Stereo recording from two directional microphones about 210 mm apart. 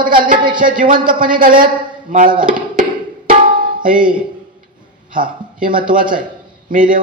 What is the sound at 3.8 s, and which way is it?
Speech, 40° right (ahead or behind).